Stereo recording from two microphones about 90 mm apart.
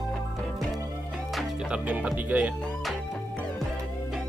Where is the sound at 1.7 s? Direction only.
15° right (ahead or behind).